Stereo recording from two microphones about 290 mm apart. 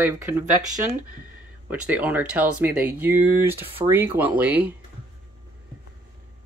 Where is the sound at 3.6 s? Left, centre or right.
Centre.